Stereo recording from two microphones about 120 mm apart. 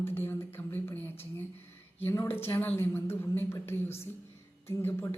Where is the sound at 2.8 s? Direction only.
20° left (ahead or behind).